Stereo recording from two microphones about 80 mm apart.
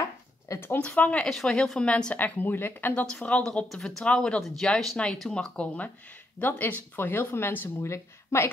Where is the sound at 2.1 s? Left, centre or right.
Left.